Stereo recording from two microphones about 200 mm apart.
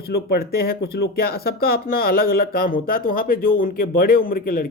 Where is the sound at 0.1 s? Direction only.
50° left (ahead or behind).